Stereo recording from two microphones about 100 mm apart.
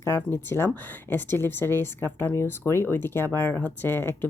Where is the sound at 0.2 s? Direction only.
20° left (ahead or behind).